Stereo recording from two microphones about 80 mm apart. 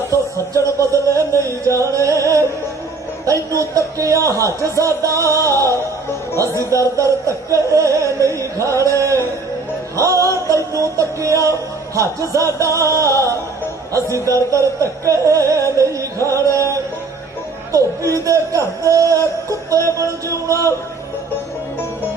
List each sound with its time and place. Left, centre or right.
0.1 s a sound: right
1.6 s music: right
3.6 s music: right
6.9 s music: right
8.8 s a sound: right
10.0 s music: right
13.9 s speech: right
14.5 s music: right
17.7 s a man's voice: right
18.9 s synthetic singing: right
20.0 s music: right